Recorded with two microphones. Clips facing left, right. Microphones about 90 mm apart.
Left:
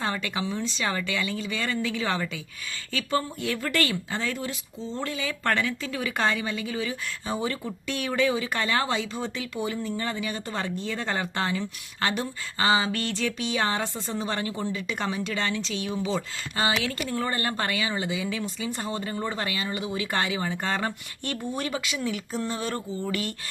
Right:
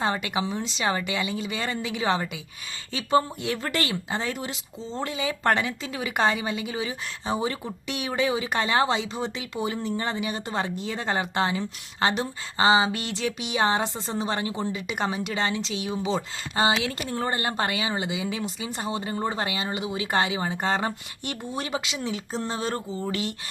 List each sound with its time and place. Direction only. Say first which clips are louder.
0.0 s a woman's voice: right 3 dB; 20° right (ahead or behind)